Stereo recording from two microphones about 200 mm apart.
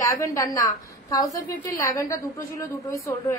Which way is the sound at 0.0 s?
15° left (ahead or behind).